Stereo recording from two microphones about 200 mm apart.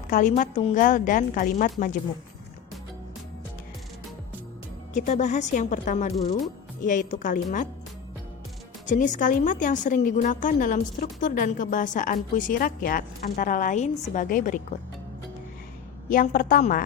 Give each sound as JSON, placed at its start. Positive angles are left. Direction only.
{"t": 0.1, "sound": "a woman's voice", "side_deg": 40}
{"t": 4.9, "sound": "a woman's voice", "side_deg": 35}
{"t": 8.9, "sound": "a woman's voice", "side_deg": 40}
{"t": 16.0, "sound": "a woman's voice", "side_deg": 45}